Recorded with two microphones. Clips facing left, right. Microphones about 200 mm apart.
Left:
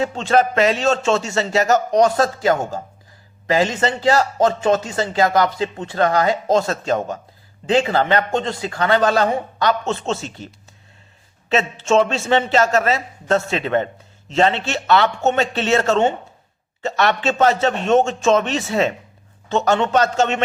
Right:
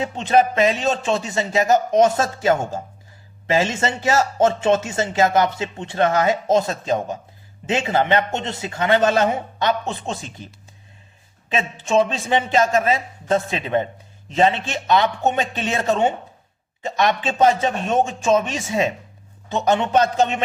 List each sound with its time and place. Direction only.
0.2 s a man's voice: 15° right (ahead or behind)
11.9 s a man's voice: 15° right (ahead or behind)